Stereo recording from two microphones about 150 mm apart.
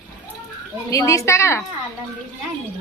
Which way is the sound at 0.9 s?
20° left (ahead or behind).